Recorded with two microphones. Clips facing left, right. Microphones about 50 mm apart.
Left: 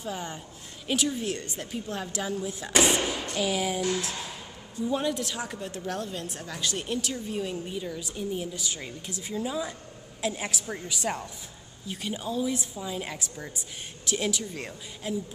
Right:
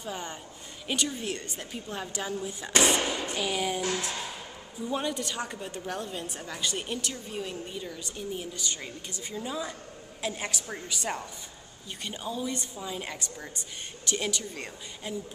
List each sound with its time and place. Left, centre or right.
0.0 s a woman's voice: centre